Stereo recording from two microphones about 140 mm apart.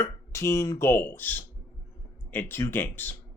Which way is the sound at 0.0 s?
20° left (ahead or behind).